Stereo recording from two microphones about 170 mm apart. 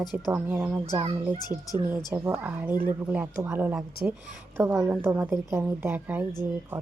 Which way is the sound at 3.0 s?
10° right (ahead or behind).